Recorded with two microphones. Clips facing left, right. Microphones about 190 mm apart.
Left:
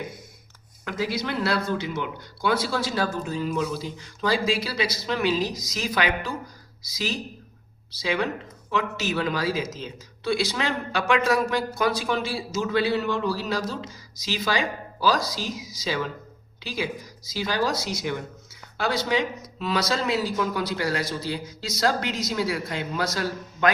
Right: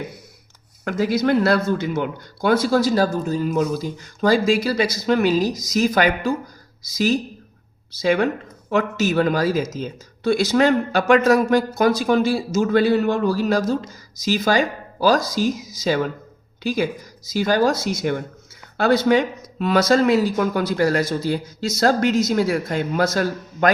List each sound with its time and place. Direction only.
0.9 s speech: 45° right (ahead or behind)